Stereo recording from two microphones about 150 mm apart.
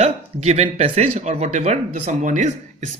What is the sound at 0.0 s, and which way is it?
Speech, 45° right (ahead or behind).